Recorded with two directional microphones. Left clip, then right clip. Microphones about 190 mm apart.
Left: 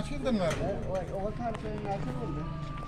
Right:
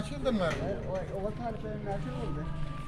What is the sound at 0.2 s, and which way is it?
Speech, 15° right (ahead or behind).